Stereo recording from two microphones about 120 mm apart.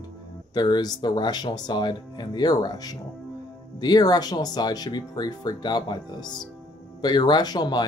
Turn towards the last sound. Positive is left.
turn(degrees=35)  # may be behind; listen again after turning